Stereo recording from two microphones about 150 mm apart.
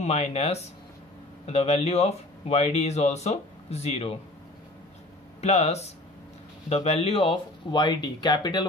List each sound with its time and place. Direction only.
0.0 s speech: 45° left (ahead or behind)
5.4 s speech: 45° left (ahead or behind); by 8.6 s 30° left (ahead or behind)